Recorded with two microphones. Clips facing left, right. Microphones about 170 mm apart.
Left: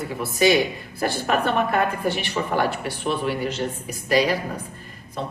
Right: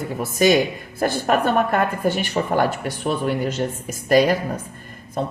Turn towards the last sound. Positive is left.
turn(degrees=-45)  # may be behind; listen again after turning